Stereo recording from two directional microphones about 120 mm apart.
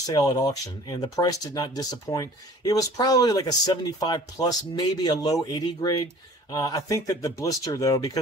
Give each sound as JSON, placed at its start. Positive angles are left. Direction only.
{"t": 0.0, "sound": "speech", "side_deg": 30}